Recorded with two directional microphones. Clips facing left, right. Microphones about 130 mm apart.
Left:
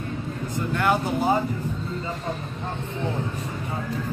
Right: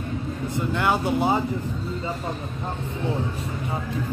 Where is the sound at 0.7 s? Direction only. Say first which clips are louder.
Even; 20° right (ahead or behind).